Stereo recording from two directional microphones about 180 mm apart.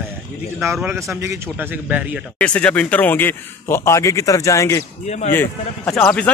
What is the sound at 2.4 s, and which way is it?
A man's voice, 5° left (ahead or behind).